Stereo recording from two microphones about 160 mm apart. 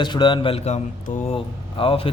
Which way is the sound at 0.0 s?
30° left (ahead or behind).